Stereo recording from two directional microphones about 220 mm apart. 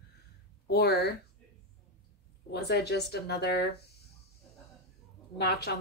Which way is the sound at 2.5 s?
45° left (ahead or behind).